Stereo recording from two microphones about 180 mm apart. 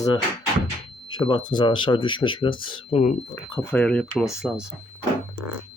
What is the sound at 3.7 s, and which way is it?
Speech, 5° left (ahead or behind).